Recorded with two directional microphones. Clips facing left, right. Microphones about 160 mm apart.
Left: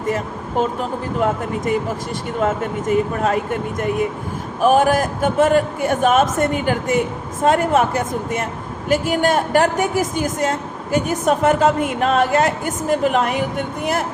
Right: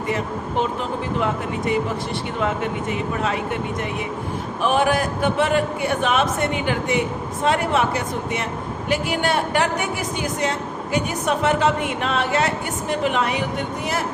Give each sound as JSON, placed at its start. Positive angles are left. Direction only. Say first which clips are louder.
{"t": 2.4, "sound": "a woman's voice", "louder": "left 4 dB", "side_deg": 45}